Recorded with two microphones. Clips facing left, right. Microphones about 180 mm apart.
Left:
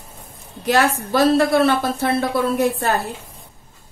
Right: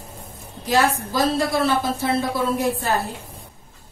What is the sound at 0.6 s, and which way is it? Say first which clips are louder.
A woman's voice: left 2 dB; 65° left (ahead or behind).